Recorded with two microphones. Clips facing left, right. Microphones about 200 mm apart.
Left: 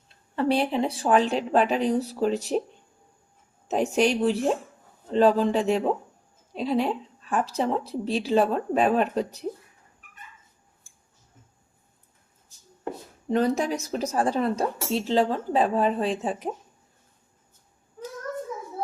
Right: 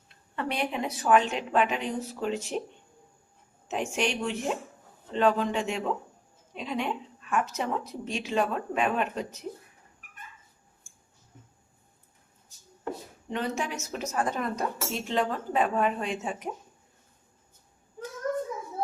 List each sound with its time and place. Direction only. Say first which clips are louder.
0.3 s speech: left 7 dB; 30° left (ahead or behind)
3.7 s speech: left 7 dB; 35° left (ahead or behind)
13.2 s speech: left 8 dB; 40° left (ahead or behind)